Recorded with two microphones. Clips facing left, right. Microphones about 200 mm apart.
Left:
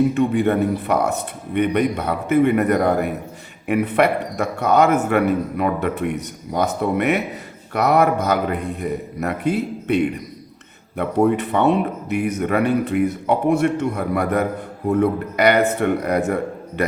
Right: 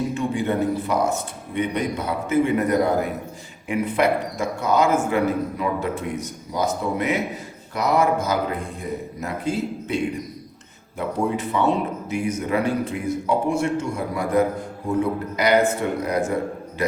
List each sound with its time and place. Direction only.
0.1 s a man's voice: 60° left (ahead or behind)